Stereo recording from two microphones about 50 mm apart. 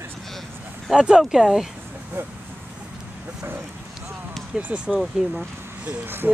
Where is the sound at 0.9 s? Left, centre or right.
Centre.